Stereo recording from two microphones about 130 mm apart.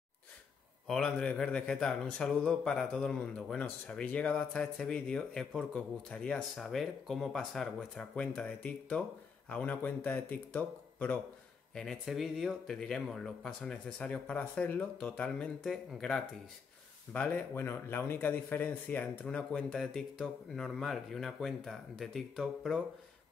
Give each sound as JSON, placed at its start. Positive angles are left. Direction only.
{"t": 0.8, "sound": "speech", "side_deg": 5}